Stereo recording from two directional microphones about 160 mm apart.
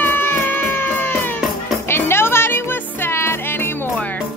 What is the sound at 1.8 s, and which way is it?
Music, 15° left (ahead or behind).